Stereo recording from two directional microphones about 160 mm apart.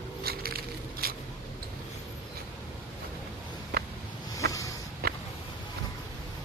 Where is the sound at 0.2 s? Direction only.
70° right (ahead or behind).